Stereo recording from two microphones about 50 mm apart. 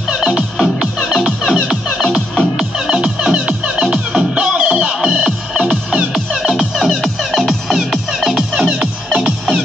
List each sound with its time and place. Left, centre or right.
0.1 s music: centre
0.9 s music: centre
2.5 s music: centre